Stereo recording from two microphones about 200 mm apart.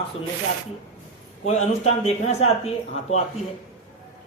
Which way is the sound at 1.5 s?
30° left (ahead or behind).